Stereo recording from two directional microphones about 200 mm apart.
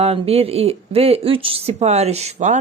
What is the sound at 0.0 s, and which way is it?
Speech, 30° right (ahead or behind).